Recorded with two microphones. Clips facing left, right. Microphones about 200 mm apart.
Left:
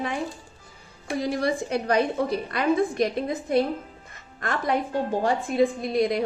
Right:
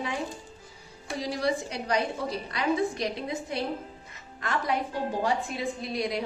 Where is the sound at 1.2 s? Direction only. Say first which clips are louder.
Left 3 dB; 55° left (ahead or behind).